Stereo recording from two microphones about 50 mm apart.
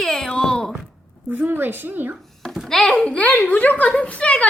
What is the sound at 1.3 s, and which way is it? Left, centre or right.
Speech, right.